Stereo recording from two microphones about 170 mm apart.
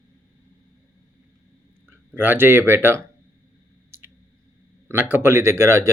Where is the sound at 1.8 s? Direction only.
10° right (ahead or behind).